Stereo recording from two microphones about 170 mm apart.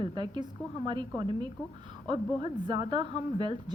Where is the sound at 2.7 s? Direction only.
25° right (ahead or behind).